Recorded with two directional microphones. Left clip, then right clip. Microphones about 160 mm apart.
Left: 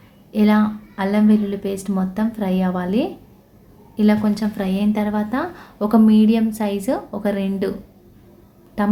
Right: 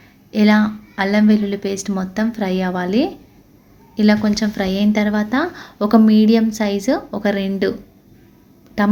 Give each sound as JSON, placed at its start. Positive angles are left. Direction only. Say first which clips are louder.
{"t": 0.3, "sound": "a woman's voice", "louder": "right 2 dB", "side_deg": -15}
{"t": 8.8, "sound": "a woman's voice", "louder": "right 3 dB", "side_deg": -20}